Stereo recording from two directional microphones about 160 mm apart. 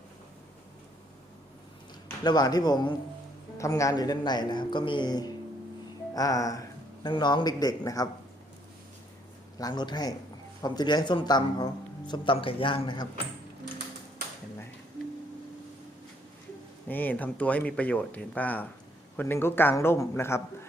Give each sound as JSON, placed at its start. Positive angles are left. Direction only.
{"t": 2.2, "sound": "a man's voice", "side_deg": 25}
{"t": 9.6, "sound": "a man's voice", "side_deg": 25}
{"t": 16.9, "sound": "speech", "side_deg": 10}